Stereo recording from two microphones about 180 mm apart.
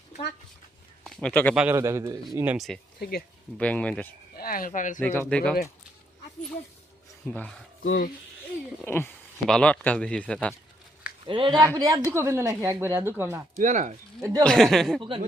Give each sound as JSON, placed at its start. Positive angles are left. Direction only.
{"t": 1.0, "sound": "speech", "side_deg": 5}
{"t": 1.5, "sound": "a woman's voice", "side_deg": -10}
{"t": 2.6, "sound": "speech", "side_deg": 0}
{"t": 3.0, "sound": "speech", "side_deg": 60}
{"t": 3.6, "sound": "speech", "side_deg": 5}
{"t": 4.4, "sound": "speech", "side_deg": 55}
{"t": 4.9, "sound": "speech", "side_deg": 10}
{"t": 7.3, "sound": "speech", "side_deg": 5}
{"t": 8.8, "sound": "speech", "side_deg": 10}
{"t": 11.3, "sound": "speech", "side_deg": -30}
{"t": 11.6, "sound": "a woman's voice", "side_deg": -15}
{"t": 13.6, "sound": "speech", "side_deg": -45}
{"t": 14.2, "sound": "speech", "side_deg": -20}
{"t": 14.4, "sound": "speech", "side_deg": 5}